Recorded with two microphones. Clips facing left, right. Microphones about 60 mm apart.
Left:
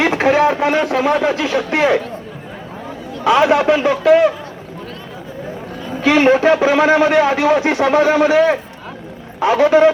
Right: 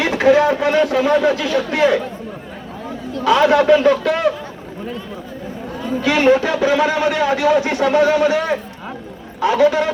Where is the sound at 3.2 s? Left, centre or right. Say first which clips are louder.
Left 1 dB; left; by 4.3 s centre.